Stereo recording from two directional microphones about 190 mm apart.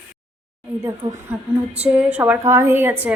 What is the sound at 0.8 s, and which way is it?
Female singing, 15° right (ahead or behind).